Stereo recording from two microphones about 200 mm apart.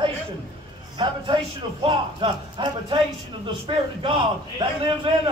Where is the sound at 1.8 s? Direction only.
25° right (ahead or behind).